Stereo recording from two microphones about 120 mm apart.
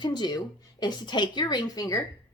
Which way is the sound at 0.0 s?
35° left (ahead or behind).